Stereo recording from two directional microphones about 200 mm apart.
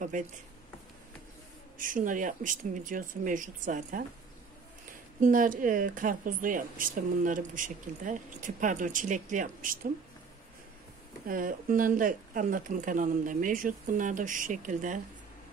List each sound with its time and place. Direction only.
1.8 s speech: 40° right (ahead or behind)
5.2 s speech: 40° right (ahead or behind)
11.2 s speech: 45° right (ahead or behind)